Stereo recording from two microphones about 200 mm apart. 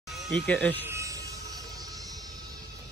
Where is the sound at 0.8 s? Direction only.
15° right (ahead or behind).